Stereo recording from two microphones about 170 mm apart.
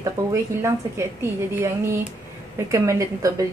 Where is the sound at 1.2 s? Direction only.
15° right (ahead or behind).